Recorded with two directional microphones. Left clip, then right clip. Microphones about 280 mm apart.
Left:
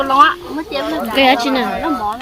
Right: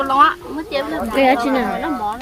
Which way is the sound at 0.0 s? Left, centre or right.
Centre.